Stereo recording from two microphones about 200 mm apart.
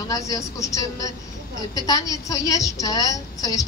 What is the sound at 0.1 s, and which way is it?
A woman's voice, 15° left (ahead or behind).